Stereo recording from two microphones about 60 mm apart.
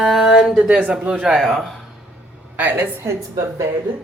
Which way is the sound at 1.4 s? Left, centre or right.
Centre.